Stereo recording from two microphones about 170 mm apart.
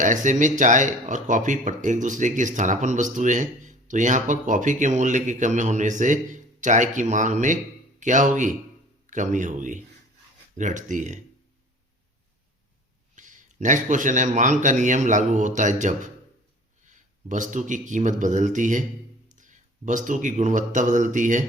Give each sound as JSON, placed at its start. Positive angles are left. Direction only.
{"t": 0.0, "sound": "speech", "side_deg": -45}
{"t": 13.1, "sound": "speech", "side_deg": -50}